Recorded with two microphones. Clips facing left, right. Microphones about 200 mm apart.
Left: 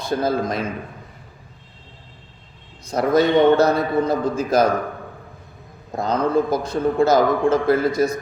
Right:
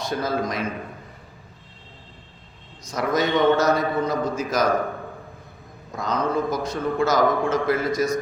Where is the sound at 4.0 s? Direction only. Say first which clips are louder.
Left 3 dB; 30° left (ahead or behind).